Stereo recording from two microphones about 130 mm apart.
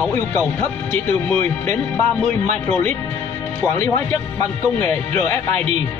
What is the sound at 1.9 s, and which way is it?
Speech, 10° left (ahead or behind).